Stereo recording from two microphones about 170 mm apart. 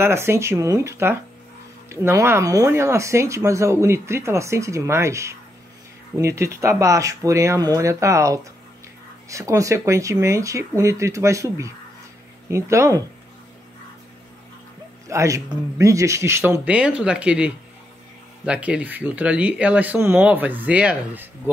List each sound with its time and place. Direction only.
0.0 s speech: 15° right (ahead or behind)
15.0 s speech: 20° right (ahead or behind)